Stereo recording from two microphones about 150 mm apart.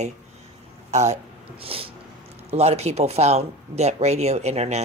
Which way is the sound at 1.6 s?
40° right (ahead or behind).